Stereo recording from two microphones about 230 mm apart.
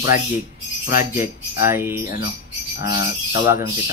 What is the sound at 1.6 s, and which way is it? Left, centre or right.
A man's voice, centre.